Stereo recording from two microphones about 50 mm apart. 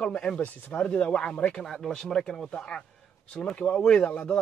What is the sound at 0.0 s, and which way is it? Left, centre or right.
Speech, left.